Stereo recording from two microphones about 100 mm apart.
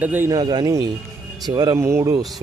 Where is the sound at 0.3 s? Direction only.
45° right (ahead or behind).